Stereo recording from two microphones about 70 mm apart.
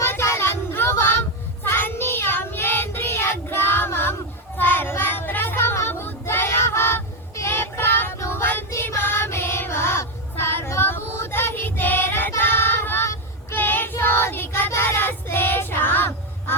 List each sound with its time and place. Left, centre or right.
0.0 s child singing: left